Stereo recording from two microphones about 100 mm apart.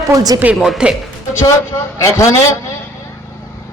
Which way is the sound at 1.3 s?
30° left (ahead or behind).